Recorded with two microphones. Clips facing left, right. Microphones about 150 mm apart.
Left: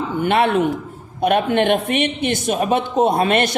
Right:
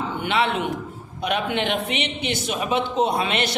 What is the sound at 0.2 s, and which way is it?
Speech, 50° left (ahead or behind).